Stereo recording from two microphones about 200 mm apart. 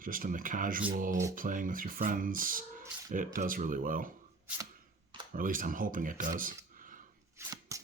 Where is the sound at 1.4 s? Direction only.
40° right (ahead or behind).